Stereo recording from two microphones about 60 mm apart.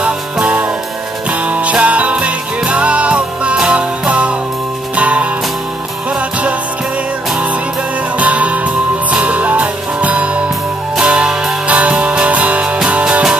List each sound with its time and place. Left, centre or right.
0.0 s music: centre
8.2 s music: right